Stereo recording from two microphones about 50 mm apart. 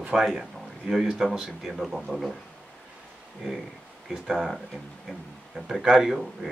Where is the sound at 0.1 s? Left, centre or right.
Centre.